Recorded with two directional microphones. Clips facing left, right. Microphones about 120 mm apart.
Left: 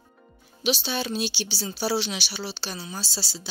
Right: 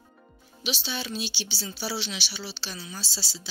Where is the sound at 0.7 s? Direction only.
50° left (ahead or behind).